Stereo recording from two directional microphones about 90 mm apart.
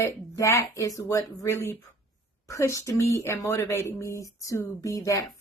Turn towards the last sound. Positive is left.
turn(degrees=40)  # may be behind; listen again after turning